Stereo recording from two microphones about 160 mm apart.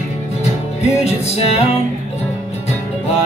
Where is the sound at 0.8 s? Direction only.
45° left (ahead or behind).